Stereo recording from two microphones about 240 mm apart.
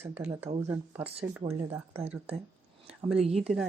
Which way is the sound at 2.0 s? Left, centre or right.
Right.